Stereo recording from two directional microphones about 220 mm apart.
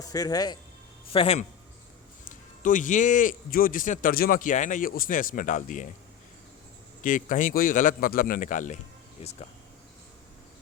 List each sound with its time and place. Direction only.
0.0 s a man's voice: 15° left (ahead or behind); by 5.9 s 35° left (ahead or behind)
7.0 s a man's voice: 35° left (ahead or behind)